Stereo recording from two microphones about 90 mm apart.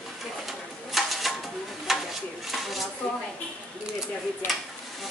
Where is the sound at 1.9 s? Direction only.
5° right (ahead or behind).